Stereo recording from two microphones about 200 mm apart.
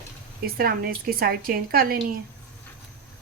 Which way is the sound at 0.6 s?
50° right (ahead or behind).